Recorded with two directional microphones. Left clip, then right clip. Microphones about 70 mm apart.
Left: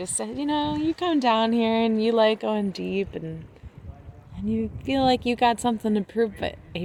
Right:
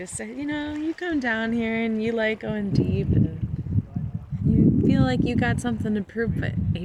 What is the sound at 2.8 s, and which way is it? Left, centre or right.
Speech, centre.